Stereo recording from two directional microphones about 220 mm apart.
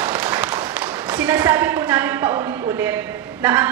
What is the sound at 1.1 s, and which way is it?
A woman's voice, 5° right (ahead or behind).